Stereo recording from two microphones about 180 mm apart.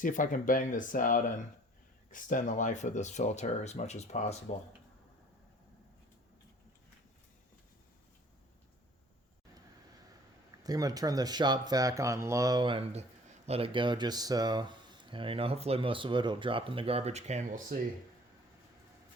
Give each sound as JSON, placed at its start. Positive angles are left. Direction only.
{"t": 0.0, "sound": "speech", "side_deg": 45}
{"t": 10.6, "sound": "speech", "side_deg": -20}